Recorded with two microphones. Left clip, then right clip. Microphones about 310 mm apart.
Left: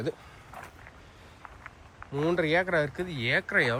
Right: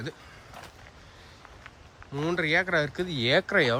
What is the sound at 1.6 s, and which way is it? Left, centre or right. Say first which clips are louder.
Speech: left 2 dB; centre.